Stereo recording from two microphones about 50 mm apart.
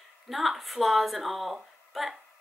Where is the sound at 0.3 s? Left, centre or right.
Centre.